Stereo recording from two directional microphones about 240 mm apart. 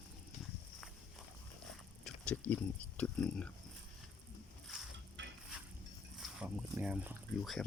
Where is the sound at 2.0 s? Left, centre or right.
Centre.